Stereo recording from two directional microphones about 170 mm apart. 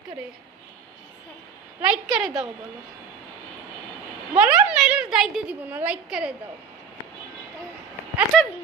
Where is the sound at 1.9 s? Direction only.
Centre (ahead or behind).